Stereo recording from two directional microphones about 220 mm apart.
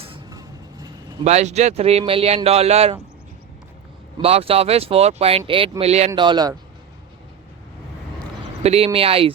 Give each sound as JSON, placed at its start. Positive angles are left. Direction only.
{"t": 0.0, "sound": "a sound", "side_deg": -20}
{"t": 1.2, "sound": "speech", "side_deg": -30}
{"t": 4.2, "sound": "speech", "side_deg": -25}
{"t": 8.6, "sound": "speech", "side_deg": -25}